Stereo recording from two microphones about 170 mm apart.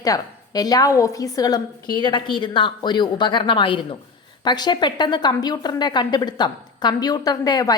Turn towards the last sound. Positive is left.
turn(degrees=25)  # may be behind; listen again after turning